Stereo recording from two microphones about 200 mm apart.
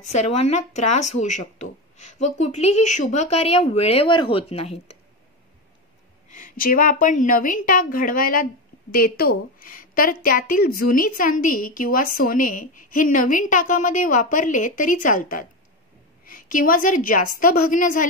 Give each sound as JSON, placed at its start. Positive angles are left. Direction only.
{"t": 0.0, "sound": "speech", "side_deg": 35}
{"t": 6.2, "sound": "a woman's voice", "side_deg": 40}